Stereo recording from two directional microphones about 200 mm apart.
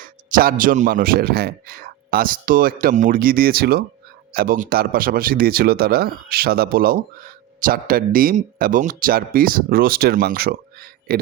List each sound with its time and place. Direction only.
0.0 s speech: 45° right (ahead or behind)